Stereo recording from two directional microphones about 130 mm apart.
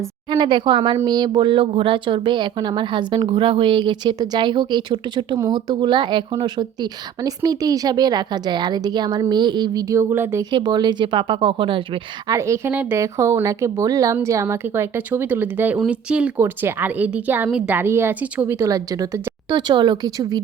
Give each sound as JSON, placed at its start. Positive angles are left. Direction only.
{"t": 0.3, "sound": "speech", "side_deg": -35}
{"t": 10.5, "sound": "speech", "side_deg": -35}
{"t": 12.3, "sound": "a woman's voice", "side_deg": -20}